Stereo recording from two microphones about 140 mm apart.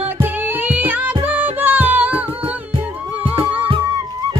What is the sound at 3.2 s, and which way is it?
Music, 40° right (ahead or behind).